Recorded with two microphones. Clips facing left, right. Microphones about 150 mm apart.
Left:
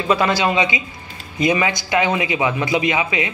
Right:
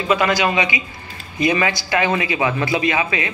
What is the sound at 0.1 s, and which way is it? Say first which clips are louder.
A man's voice: even; 30° left (ahead or behind).